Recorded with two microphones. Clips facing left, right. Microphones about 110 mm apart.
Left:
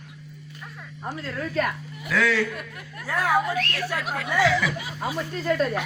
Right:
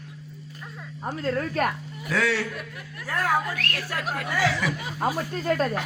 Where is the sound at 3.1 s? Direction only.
15° left (ahead or behind).